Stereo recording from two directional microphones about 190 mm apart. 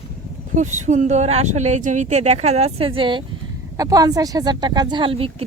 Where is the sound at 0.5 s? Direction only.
40° right (ahead or behind).